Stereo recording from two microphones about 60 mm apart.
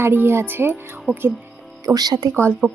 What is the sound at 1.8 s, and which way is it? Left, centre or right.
Speech, right.